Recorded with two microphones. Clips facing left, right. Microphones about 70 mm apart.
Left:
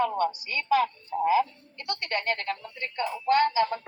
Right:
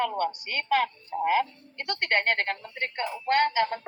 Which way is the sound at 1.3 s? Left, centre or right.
Right.